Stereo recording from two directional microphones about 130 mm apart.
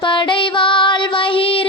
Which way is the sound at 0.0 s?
40° left (ahead or behind).